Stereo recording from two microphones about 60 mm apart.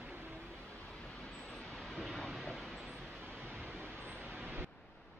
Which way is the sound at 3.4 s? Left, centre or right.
Right.